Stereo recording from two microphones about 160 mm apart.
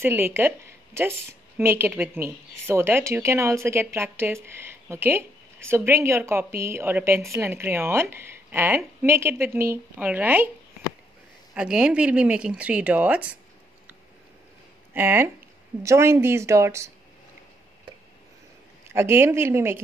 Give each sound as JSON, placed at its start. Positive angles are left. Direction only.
{"t": 0.0, "sound": "speech", "side_deg": -15}
{"t": 11.5, "sound": "speech", "side_deg": -5}
{"t": 15.0, "sound": "speech", "side_deg": -10}
{"t": 18.9, "sound": "speech", "side_deg": -15}